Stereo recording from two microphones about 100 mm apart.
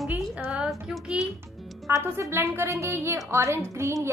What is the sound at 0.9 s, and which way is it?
Music, 5° right (ahead or behind).